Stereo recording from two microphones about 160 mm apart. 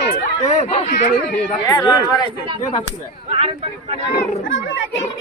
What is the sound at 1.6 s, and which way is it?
Speech, 20° left (ahead or behind).